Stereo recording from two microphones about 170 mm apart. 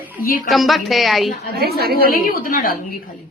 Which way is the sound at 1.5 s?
65° right (ahead or behind).